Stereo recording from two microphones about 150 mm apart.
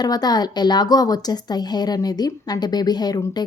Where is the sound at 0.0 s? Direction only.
25° left (ahead or behind).